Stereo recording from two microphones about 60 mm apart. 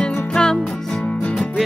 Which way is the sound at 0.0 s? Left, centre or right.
Centre.